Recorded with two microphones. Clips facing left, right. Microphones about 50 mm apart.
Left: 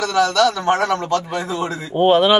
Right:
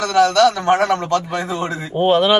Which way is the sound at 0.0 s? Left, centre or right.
Centre.